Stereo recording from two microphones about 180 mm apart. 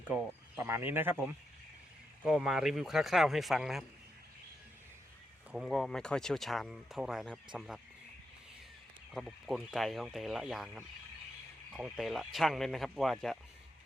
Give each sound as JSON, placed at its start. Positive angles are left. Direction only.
{"t": 0.1, "sound": "speech", "side_deg": -10}
{"t": 5.5, "sound": "speech", "side_deg": 0}
{"t": 9.1, "sound": "speech", "side_deg": 0}